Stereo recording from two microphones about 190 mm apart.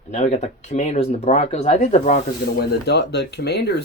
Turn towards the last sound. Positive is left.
turn(degrees=65)  # may be behind; listen again after turning